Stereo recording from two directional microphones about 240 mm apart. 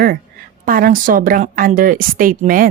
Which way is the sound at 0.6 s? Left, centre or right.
Right.